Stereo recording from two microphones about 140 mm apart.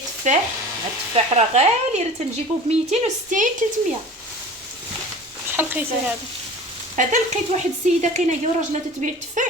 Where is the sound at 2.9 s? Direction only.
70° right (ahead or behind).